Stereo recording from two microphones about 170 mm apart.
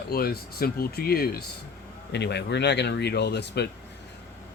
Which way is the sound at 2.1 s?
80° left.